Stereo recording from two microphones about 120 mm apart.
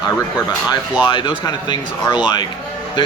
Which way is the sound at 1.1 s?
35° left (ahead or behind).